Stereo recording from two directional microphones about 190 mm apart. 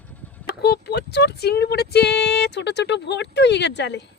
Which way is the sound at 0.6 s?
60° left (ahead or behind).